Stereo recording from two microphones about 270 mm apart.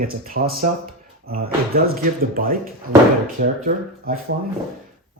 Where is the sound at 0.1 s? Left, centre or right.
Right.